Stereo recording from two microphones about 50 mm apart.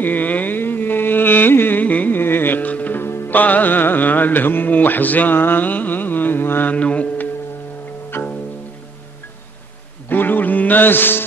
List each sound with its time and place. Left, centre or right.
0.0 s a sound: left
2.1 s music: left
3.0 s music: left
3.3 s music: left
6.7 s mantra: left
8.1 s music: left
10.0 s a man's voice: left